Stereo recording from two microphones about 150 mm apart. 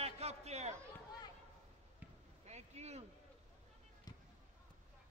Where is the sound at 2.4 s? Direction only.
45° right (ahead or behind).